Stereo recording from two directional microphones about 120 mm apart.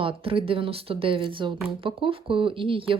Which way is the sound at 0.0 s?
50° right (ahead or behind).